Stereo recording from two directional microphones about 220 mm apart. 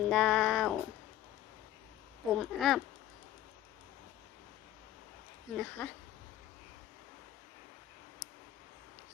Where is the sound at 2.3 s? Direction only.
Centre (ahead or behind).